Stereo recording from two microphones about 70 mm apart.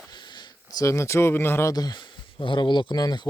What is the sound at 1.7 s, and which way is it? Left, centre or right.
Speech, left.